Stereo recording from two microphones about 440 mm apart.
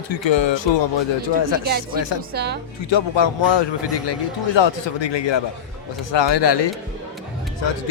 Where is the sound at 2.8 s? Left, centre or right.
Left.